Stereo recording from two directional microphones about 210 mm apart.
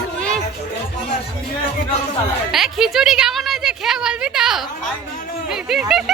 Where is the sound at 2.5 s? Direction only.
Centre (ahead or behind).